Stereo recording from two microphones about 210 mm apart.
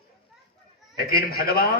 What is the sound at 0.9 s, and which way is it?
Speech, 45° left (ahead or behind).